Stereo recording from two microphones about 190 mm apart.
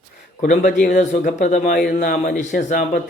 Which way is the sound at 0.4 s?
45° left (ahead or behind).